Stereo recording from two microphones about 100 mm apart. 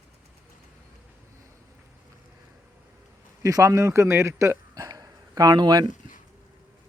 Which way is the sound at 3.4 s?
30° right (ahead or behind).